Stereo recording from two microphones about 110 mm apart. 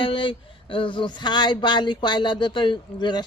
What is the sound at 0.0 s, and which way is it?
Speech, 50° left (ahead or behind).